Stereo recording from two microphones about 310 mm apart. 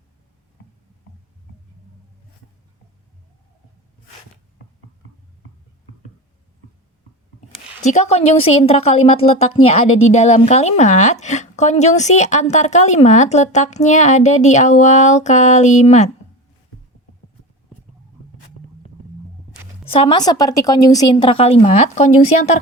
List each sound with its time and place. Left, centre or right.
7.9 s speech: left
19.9 s a woman's voice: centre